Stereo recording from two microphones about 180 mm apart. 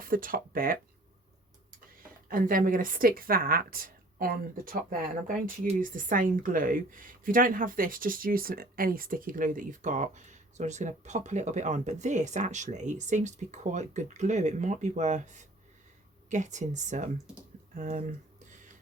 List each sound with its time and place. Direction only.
0.0 s speech: 50° right (ahead or behind)
2.3 s speech: 50° right (ahead or behind)